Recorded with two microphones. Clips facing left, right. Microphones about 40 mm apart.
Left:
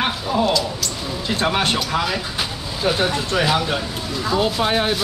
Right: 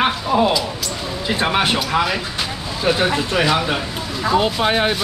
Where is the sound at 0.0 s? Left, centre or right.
Centre.